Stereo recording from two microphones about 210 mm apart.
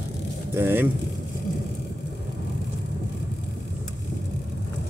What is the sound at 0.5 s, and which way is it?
Speech, 10° right (ahead or behind).